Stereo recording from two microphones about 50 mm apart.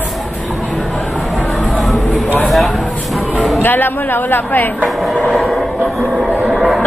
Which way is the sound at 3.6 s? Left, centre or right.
Left.